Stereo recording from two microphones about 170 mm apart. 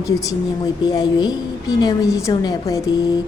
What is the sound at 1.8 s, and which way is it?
A woman's voice, 20° left (ahead or behind).